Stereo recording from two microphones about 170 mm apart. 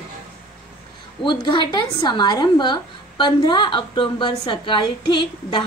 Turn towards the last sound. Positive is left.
turn(degrees=30)  # may be behind; listen again after turning